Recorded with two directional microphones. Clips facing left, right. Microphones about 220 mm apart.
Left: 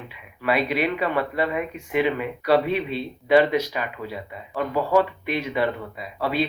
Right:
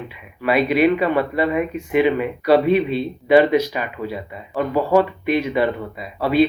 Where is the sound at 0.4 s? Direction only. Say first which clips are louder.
Right 7 dB; 5° right (ahead or behind).